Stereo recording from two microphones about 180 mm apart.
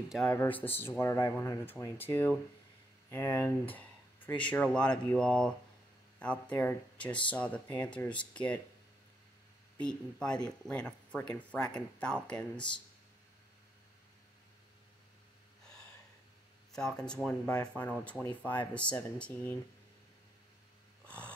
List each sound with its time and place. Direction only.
0.3 s speech: 10° left (ahead or behind)
9.8 s speech: 5° left (ahead or behind)
12.5 s speech: 25° left (ahead or behind)
16.7 s speech: 5° left (ahead or behind)
21.0 s snort: 5° left (ahead or behind)